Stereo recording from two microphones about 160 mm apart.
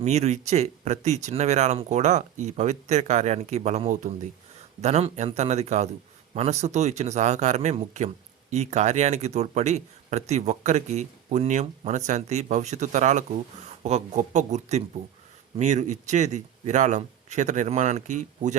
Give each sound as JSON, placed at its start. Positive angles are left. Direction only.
{"t": 0.0, "sound": "speech", "side_deg": -45}